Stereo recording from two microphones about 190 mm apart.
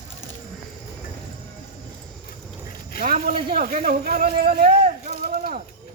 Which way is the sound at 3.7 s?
50° right (ahead or behind).